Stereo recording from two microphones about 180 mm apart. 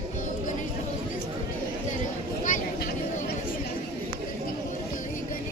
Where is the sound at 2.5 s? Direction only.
60° left (ahead or behind).